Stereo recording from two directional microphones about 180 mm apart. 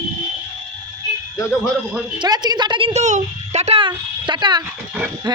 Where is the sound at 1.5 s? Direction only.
5° right (ahead or behind).